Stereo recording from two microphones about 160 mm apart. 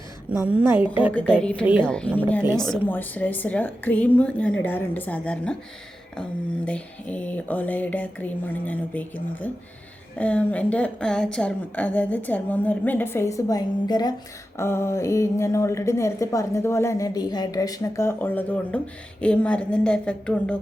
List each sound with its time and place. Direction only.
0.3 s a woman's voice: 10° right (ahead or behind)
1.1 s a woman's voice: 5° left (ahead or behind)
6.7 s a woman's voice: 10° left (ahead or behind)